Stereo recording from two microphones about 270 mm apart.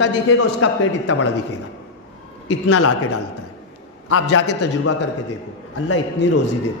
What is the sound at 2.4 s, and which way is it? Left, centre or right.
Speech, left.